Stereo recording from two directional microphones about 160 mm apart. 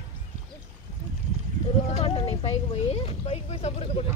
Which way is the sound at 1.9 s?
35° left (ahead or behind).